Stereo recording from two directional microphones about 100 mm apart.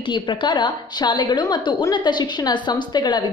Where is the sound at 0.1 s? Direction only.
50° left (ahead or behind).